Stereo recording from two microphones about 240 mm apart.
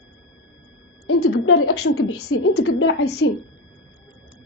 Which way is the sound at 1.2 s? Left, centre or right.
Left.